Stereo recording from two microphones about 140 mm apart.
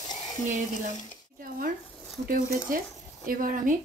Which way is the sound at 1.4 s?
90° right.